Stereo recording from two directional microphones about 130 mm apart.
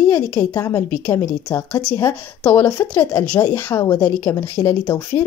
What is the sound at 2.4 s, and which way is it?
Speech, 15° left (ahead or behind).